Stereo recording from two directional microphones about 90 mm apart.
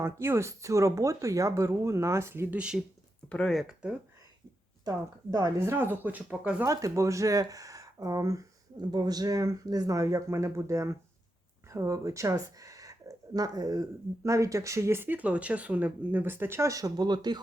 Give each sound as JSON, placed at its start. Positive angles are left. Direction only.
{"t": 0.0, "sound": "speech", "side_deg": -30}
{"t": 2.5, "sound": "speech", "side_deg": -10}
{"t": 3.2, "sound": "speech", "side_deg": 15}
{"t": 3.5, "sound": "speech", "side_deg": 0}
{"t": 4.9, "sound": "speech", "side_deg": -45}
{"t": 5.5, "sound": "speech", "side_deg": -25}
{"t": 6.7, "sound": "speech", "side_deg": -35}